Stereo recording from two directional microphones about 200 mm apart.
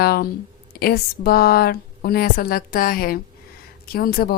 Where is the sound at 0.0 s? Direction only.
50° left (ahead or behind).